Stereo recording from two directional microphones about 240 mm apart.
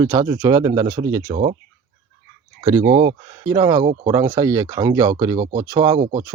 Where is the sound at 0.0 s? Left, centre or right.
Centre.